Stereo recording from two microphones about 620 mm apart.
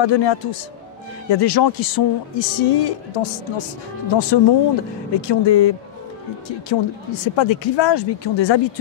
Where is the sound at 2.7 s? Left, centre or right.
Left.